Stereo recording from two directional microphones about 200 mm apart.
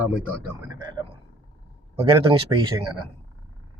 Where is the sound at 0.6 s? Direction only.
20° right (ahead or behind).